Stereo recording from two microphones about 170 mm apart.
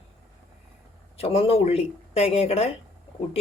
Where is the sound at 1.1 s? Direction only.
35° left (ahead or behind).